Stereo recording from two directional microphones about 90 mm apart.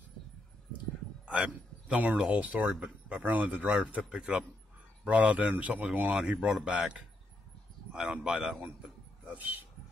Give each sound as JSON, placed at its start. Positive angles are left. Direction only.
{"t": 1.2, "sound": "a man's voice", "side_deg": -10}